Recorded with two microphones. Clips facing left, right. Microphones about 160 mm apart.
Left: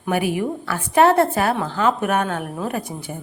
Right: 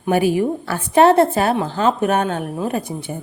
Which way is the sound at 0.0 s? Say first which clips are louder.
Right 5 dB; 30° right (ahead or behind).